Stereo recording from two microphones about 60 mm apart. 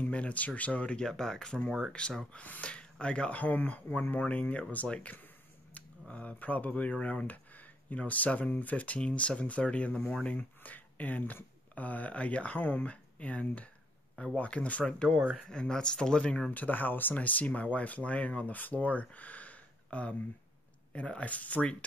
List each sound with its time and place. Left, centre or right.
0.0 s a sound: left
0.6 s speech: left
16.4 s speech: left